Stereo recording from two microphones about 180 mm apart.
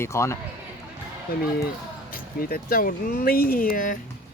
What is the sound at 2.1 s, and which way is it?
Speech, 55° left (ahead or behind).